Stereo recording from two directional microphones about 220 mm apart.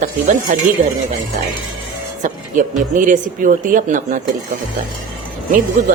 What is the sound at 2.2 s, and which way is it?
Speech, 35° right (ahead or behind).